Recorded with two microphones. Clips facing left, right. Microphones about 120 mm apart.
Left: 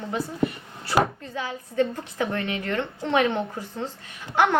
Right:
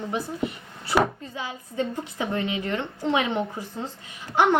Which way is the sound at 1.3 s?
15° right (ahead or behind).